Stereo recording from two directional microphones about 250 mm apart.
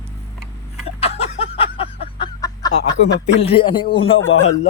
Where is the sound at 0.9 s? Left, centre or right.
Left.